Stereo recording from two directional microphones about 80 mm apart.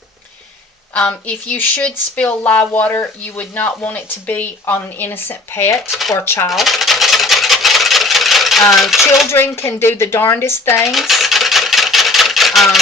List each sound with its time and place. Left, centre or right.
0.9 s speech: centre; by 5.9 s left
5.9 s speech: centre
6.1 s speech: left
6.5 s a sound: centre
9.2 s speech: left
10.8 s a sound: centre